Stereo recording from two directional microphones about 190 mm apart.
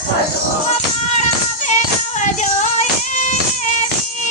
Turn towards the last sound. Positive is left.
turn(degrees=40)  # may be behind; listen again after turning